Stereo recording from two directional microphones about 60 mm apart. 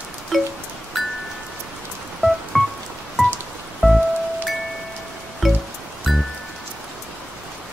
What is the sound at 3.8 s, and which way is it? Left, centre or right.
Music, centre.